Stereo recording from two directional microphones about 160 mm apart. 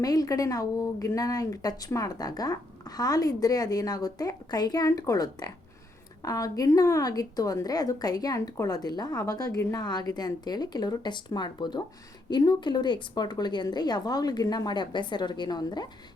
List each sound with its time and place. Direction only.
0.0 s a woman's voice: 25° left (ahead or behind)